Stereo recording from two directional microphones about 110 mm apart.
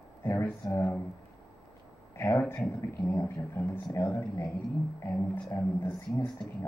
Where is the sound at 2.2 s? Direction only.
20° left (ahead or behind).